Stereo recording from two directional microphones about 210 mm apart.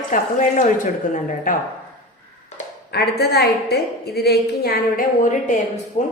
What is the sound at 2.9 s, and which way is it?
A woman's voice, 50° left (ahead or behind).